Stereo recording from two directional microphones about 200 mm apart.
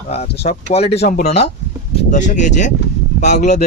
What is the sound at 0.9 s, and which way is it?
Speech, 35° left (ahead or behind).